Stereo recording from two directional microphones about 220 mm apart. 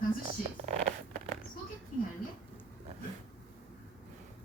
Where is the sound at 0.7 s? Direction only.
30° right (ahead or behind).